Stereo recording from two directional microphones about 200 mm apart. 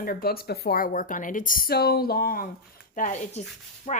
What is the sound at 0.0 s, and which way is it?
Speech, 45° left (ahead or behind).